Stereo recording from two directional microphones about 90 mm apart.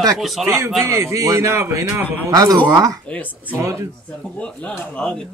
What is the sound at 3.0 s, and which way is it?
Speech, 15° left (ahead or behind).